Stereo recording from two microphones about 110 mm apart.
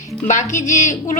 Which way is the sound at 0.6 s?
90° left.